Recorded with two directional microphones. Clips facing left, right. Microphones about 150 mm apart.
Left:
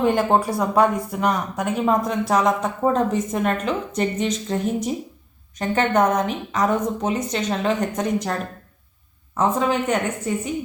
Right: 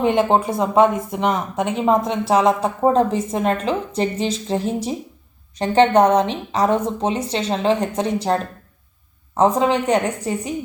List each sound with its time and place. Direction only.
0.1 s a woman's voice: 20° right (ahead or behind)